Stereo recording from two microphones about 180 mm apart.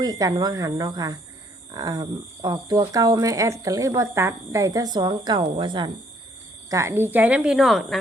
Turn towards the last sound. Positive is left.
turn(degrees=0)  # may be behind; listen again after turning